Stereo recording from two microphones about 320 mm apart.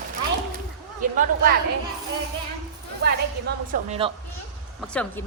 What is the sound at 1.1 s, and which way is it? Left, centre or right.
Speech, right.